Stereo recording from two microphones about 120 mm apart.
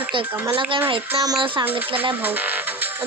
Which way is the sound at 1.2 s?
30° right (ahead or behind).